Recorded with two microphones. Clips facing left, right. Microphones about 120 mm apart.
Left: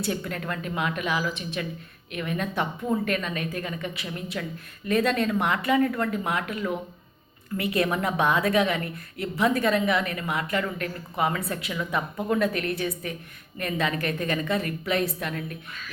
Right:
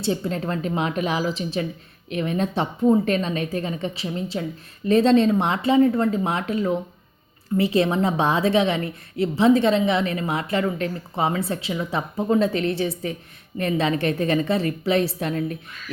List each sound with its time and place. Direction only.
0.0 s a woman's voice: 25° right (ahead or behind)